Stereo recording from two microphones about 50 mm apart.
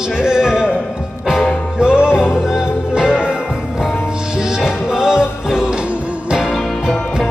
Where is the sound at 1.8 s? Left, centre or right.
Centre.